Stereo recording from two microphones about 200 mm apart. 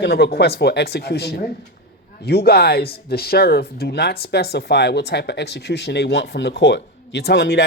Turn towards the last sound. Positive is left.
turn(degrees=55)  # may be behind; listen again after turning